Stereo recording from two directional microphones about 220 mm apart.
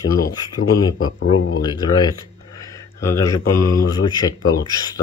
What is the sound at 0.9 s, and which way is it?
Speech, 75° left (ahead or behind).